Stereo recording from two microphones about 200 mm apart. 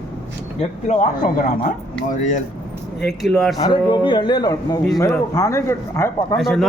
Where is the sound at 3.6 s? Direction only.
20° left (ahead or behind).